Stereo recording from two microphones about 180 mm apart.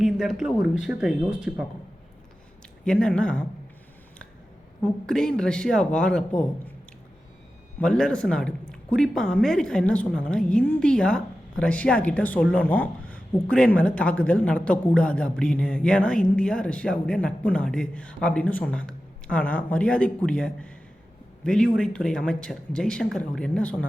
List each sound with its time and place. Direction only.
0.0 s a woman's voice: centre (ahead or behind)
2.8 s a woman's voice: 5° left (ahead or behind)
4.8 s a woman's voice: 5° left (ahead or behind)
7.8 s a woman's voice: 5° left (ahead or behind)